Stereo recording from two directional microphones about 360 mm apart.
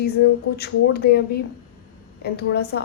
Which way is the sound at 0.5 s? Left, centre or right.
Left.